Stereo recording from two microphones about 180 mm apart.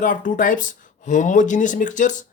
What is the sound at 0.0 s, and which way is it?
Speech, 45° left (ahead or behind).